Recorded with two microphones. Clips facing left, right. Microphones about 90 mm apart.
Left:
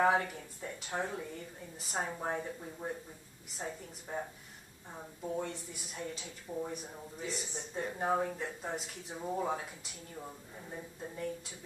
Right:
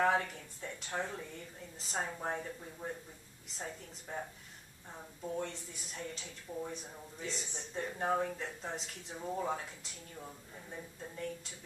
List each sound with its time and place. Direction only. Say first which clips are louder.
0.0 s speech: left 2 dB; 10° left (ahead or behind)